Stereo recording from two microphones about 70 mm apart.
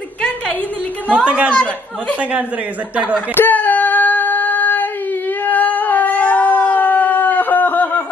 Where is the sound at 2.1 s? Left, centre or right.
Centre.